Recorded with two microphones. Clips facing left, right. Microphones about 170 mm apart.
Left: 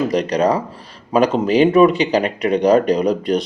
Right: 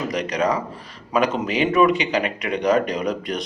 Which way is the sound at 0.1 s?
35° left (ahead or behind).